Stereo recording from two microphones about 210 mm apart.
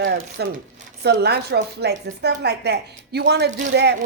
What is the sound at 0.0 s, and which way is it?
Speech, 50° right (ahead or behind).